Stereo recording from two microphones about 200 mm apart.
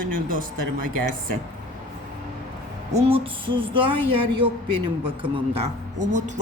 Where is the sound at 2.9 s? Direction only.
25° right (ahead or behind).